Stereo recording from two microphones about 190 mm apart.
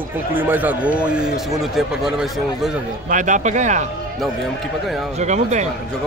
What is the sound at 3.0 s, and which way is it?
Speech, 40° right (ahead or behind).